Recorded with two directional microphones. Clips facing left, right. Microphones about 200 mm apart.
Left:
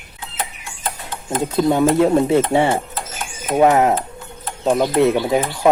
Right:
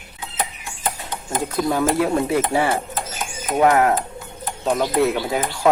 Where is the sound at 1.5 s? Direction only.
20° left (ahead or behind).